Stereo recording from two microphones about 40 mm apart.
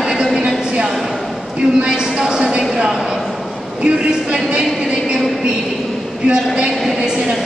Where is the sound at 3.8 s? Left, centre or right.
Right.